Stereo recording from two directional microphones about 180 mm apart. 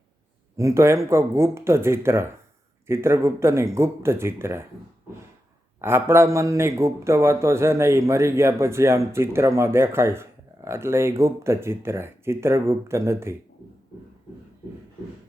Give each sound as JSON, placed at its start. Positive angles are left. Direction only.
{"t": 0.5, "sound": "a man's voice", "side_deg": -15}
{"t": 5.8, "sound": "a man's voice", "side_deg": -15}